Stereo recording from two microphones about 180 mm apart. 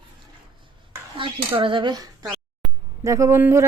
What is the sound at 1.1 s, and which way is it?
Speech, 30° right (ahead or behind).